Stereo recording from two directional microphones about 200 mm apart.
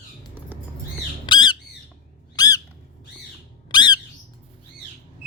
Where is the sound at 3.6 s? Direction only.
20° left (ahead or behind).